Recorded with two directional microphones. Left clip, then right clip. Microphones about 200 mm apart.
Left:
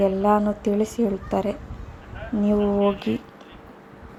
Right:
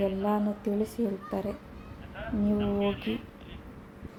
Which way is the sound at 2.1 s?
5° left (ahead or behind).